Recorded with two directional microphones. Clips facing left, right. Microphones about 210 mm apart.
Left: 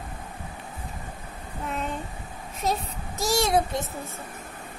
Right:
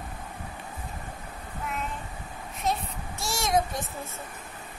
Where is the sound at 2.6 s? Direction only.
40° left (ahead or behind).